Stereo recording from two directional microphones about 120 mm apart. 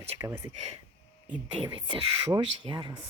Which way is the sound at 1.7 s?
40° right (ahead or behind).